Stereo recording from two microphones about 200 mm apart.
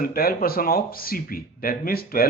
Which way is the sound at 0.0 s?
50° left (ahead or behind).